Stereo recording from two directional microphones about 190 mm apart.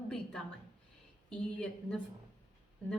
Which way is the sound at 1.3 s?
5° left (ahead or behind).